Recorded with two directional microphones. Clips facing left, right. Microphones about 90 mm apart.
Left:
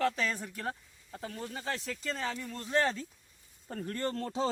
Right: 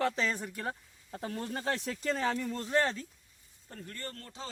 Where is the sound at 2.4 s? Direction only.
25° right (ahead or behind).